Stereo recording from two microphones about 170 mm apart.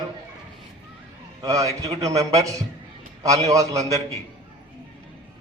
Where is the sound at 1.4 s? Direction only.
20° right (ahead or behind).